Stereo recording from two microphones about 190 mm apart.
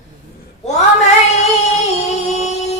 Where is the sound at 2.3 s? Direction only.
35° left (ahead or behind).